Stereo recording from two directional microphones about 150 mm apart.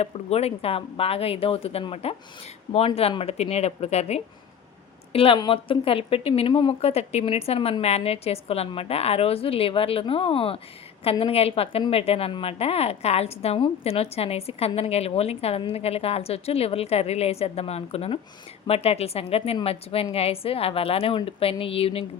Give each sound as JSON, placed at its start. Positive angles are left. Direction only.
{"t": 0.0, "sound": "a woman's voice", "side_deg": 45}